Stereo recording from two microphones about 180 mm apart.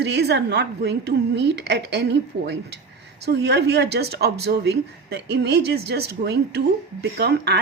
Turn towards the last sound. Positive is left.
turn(degrees=-65)  # may be behind; listen again after turning